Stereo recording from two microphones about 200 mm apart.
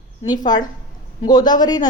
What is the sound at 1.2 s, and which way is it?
Speech, 20° left (ahead or behind).